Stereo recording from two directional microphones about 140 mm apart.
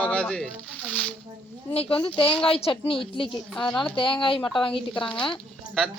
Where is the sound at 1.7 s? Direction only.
40° left (ahead or behind).